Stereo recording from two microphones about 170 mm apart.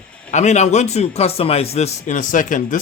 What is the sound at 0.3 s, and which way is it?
A man's voice, 45° left (ahead or behind).